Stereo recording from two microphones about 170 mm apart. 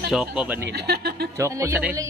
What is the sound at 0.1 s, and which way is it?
Speech, 5° right (ahead or behind).